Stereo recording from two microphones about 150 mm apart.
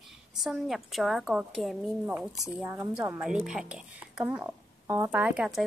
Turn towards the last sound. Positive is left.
turn(degrees=-5)  # may be behind; listen again after turning